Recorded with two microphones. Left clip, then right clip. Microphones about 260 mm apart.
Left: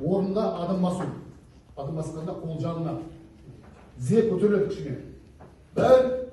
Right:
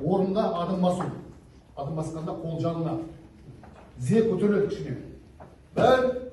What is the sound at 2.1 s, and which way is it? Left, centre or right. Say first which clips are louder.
Speech: right 1 dB; centre.